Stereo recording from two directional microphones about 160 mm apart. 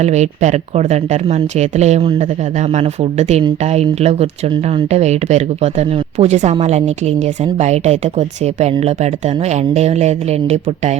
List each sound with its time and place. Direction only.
0.0 s speech: 45° right (ahead or behind)